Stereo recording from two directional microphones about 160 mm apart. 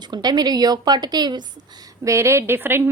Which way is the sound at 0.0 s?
25° right (ahead or behind).